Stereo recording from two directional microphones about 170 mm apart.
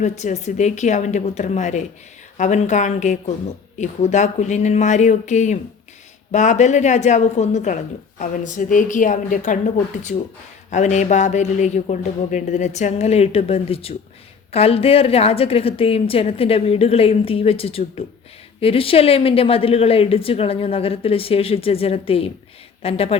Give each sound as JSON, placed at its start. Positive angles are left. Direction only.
{"t": 0.0, "sound": "a woman's voice", "side_deg": 45}